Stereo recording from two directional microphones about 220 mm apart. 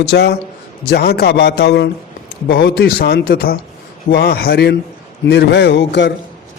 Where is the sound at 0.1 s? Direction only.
50° left (ahead or behind).